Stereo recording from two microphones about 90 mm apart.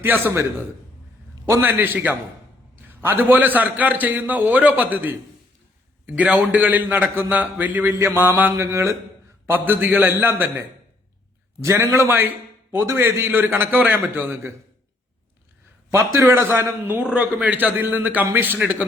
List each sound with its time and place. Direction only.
0.0 s a man's voice: 25° right (ahead or behind)
1.6 s a man's voice: 20° right (ahead or behind)
9.5 s a man's voice: 20° right (ahead or behind)
12.7 s a man's voice: 35° right (ahead or behind)
15.9 s a man's voice: 30° right (ahead or behind)